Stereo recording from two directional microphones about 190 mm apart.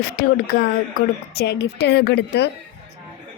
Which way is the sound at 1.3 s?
60° left (ahead or behind).